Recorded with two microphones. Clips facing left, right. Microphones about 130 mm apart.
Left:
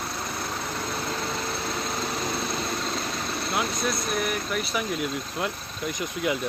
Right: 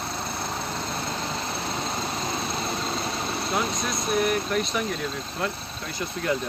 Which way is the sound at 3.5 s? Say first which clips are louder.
Left 1 dB; centre (ahead or behind).